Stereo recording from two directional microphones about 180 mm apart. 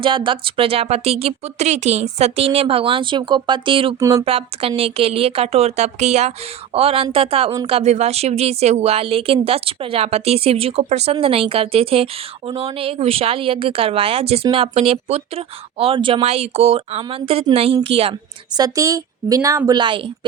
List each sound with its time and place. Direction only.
0.0 s a woman's voice: 30° right (ahead or behind)
4.0 s speech: 15° right (ahead or behind)
4.3 s a woman's voice: 35° right (ahead or behind)
7.8 s a woman's voice: 35° right (ahead or behind)
18.5 s a woman's voice: 20° right (ahead or behind)